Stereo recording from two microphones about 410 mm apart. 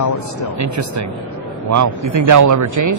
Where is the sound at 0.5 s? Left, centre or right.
Right.